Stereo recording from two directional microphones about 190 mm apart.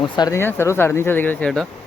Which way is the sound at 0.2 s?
15° left (ahead or behind).